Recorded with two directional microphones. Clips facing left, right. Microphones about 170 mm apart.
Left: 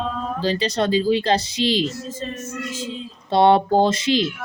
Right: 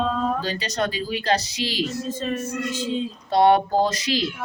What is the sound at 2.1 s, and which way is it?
Speech, 65° right (ahead or behind).